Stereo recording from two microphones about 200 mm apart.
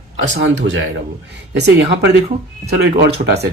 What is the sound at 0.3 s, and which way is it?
Speech, 65° right (ahead or behind).